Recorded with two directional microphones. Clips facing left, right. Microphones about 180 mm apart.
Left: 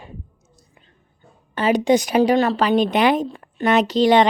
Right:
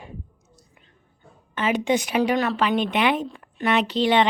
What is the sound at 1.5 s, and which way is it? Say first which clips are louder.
A woman's voice: left 5 dB; 35° left (ahead or behind).